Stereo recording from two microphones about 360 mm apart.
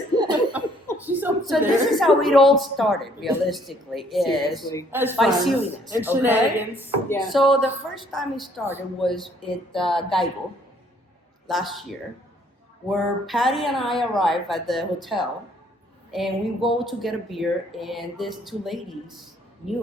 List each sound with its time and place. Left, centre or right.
0.2 s laughter: centre
1.0 s a woman's voice: centre
4.9 s a woman's voice: centre
11.4 s a woman's voice: centre
12.9 s a woman's voice: centre